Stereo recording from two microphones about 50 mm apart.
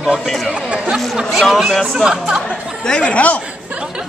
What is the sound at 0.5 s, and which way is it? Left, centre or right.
Speech, right.